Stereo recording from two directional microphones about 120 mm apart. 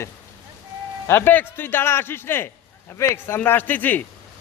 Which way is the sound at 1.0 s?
20° left (ahead or behind).